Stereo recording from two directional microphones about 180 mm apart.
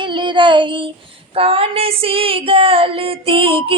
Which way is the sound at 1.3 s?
30° right (ahead or behind).